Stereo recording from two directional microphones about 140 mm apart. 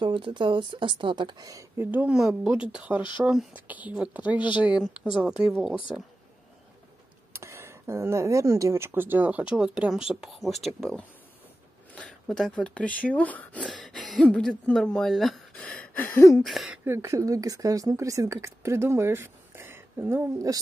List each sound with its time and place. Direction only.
0.0 s speech: 35° right (ahead or behind); by 5.8 s 5° right (ahead or behind)
7.3 s speech: 20° right (ahead or behind); by 12.9 s 10° left (ahead or behind)
13.0 s a sound: 10° left (ahead or behind)
14.0 s speech: 5° left (ahead or behind)
16.0 s a sound: 20° left (ahead or behind)
16.4 s a woman's voice: 5° right (ahead or behind); by 20.5 s 20° right (ahead or behind)